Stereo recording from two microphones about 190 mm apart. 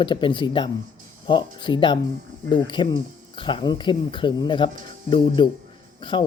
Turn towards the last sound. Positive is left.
turn(degrees=25)  # may be behind; listen again after turning